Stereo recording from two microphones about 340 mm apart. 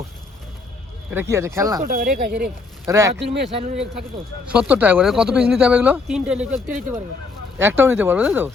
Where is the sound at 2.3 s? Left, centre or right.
Centre.